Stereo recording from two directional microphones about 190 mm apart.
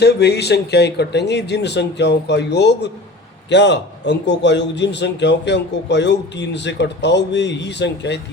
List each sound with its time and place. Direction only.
0.0 s a man's voice: 60° left (ahead or behind)